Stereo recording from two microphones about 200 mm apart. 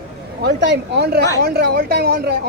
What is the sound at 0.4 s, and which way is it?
A woman's voice, 55° right (ahead or behind).